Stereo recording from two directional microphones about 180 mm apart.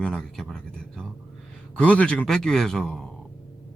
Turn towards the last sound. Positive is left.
turn(degrees=5)  # may be behind; listen again after turning